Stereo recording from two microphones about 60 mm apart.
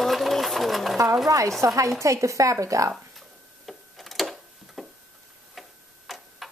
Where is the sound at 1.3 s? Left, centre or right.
Right.